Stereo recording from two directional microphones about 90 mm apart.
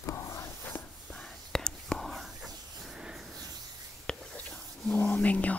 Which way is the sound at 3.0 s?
5° right (ahead or behind).